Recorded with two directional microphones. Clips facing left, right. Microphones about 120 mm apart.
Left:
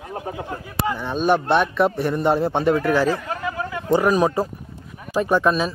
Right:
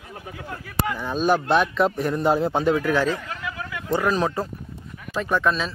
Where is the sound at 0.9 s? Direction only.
Centre (ahead or behind).